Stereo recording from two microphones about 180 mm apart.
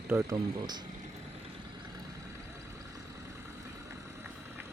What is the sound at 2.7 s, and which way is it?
Vehicle, 15° right (ahead or behind).